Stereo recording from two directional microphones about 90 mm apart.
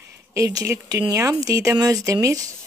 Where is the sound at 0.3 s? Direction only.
40° right (ahead or behind).